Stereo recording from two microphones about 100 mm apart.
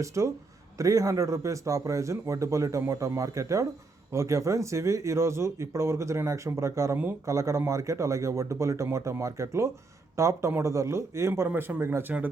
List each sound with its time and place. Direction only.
0.0 s a man's voice: 30° right (ahead or behind)